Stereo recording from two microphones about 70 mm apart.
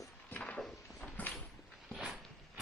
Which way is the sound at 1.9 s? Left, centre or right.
Centre.